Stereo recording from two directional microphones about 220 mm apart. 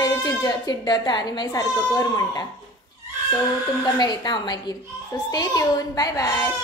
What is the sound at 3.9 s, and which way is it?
Speech, 20° left (ahead or behind).